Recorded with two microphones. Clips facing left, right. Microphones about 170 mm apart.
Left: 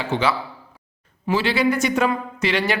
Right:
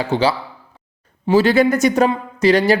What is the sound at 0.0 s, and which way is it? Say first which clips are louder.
A man's voice: right 4 dB; 35° right (ahead or behind).